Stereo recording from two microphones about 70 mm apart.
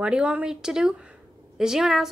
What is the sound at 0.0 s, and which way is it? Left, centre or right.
A woman's voice, centre.